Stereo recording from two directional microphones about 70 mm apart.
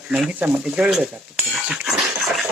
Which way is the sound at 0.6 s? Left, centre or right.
Centre.